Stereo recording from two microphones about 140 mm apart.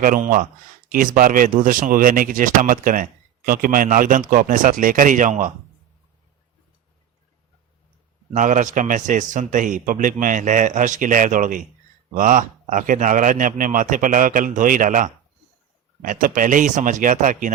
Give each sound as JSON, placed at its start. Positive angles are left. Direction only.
{"t": 0.0, "sound": "speech", "side_deg": -75}
{"t": 8.3, "sound": "speech", "side_deg": -65}